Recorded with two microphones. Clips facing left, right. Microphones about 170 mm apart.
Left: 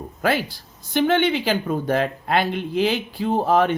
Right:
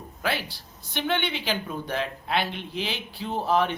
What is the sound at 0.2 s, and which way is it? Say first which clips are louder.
Speech: left 7 dB; 45° left (ahead or behind).